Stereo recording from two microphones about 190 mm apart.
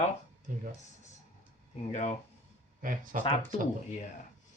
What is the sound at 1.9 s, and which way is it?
Speech, 40° left (ahead or behind).